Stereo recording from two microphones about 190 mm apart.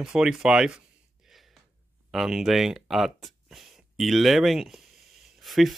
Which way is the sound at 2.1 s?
Centre (ahead or behind).